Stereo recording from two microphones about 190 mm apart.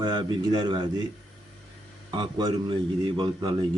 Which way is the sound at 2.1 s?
25° right (ahead or behind).